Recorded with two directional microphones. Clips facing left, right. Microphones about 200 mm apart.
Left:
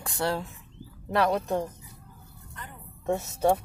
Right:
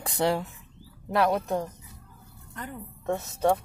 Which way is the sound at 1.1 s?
Centre (ahead or behind).